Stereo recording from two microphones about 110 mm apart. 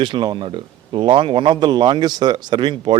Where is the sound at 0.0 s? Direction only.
45° right (ahead or behind).